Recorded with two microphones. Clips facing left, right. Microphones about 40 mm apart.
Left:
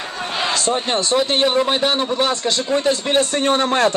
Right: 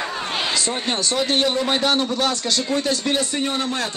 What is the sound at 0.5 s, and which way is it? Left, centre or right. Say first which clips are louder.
A man's voice: left 4 dB; left.